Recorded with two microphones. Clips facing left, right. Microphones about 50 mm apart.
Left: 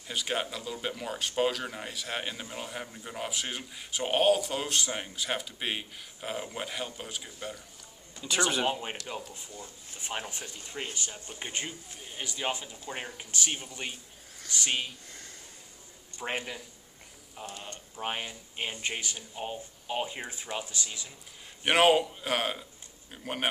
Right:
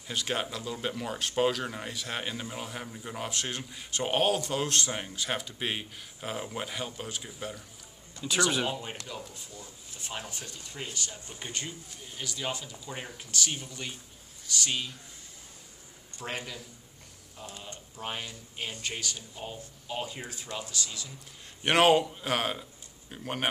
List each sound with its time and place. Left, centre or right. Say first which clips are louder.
0.1 s speech: even; centre
8.6 s speech: left 3 dB; left
16.2 s speech: left 3 dB; left
21.6 s speech: even; centre